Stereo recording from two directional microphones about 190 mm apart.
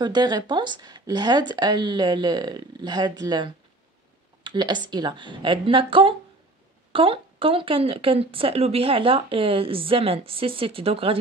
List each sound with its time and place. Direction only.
0.0 s speech: 20° right (ahead or behind)